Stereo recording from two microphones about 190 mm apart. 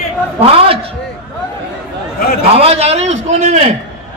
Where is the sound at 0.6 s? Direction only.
30° right (ahead or behind).